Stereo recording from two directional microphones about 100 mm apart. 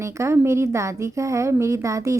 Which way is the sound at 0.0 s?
30° right (ahead or behind).